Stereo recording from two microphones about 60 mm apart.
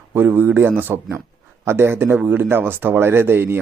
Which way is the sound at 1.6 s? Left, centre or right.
Right.